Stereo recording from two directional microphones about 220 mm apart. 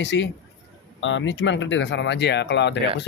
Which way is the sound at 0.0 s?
55° left (ahead or behind).